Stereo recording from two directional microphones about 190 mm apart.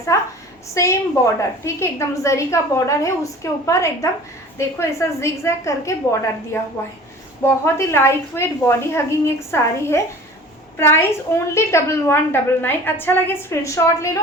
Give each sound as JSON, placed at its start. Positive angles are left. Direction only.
{"t": 0.1, "sound": "a woman's voice", "side_deg": 15}